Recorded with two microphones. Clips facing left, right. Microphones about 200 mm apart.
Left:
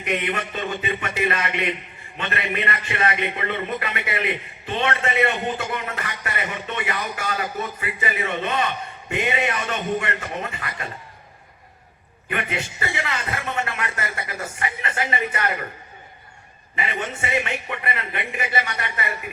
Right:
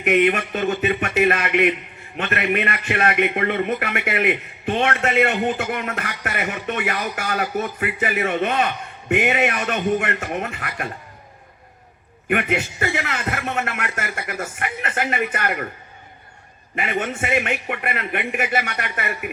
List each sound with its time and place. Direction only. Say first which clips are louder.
0.0 s a man's voice: right 8 dB; 70° right (ahead or behind)
2.1 s a man's voice: right 5 dB; 60° right (ahead or behind)
12.3 s a man's voice: right 6 dB; 55° right (ahead or behind)
16.7 s a man's voice: right 4 dB; 55° right (ahead or behind)